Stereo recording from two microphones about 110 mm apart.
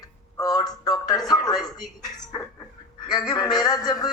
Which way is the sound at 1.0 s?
40° left (ahead or behind).